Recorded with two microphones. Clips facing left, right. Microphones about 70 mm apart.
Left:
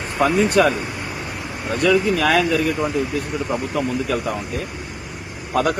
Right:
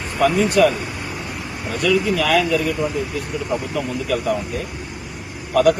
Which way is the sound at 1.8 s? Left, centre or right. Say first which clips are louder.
Left 1 dB; left.